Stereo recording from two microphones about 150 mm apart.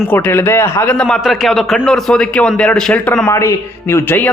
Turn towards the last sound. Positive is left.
turn(degrees=15)  # may be behind; listen again after turning